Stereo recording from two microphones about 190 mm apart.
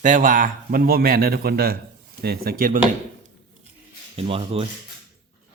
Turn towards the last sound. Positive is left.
turn(degrees=-30)  # may be behind; listen again after turning